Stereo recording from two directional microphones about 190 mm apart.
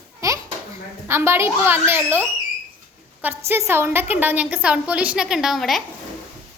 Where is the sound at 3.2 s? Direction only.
10° right (ahead or behind).